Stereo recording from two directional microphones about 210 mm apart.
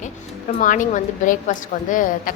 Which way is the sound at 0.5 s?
40° left (ahead or behind).